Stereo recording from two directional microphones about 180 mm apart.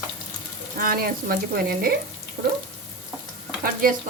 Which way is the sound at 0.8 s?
55° right (ahead or behind).